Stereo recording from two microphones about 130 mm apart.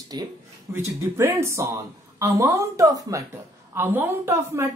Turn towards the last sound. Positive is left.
turn(degrees=-20)  # may be behind; listen again after turning